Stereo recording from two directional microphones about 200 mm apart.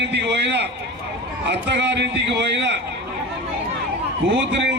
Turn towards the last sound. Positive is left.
turn(degrees=-60)  # may be behind; listen again after turning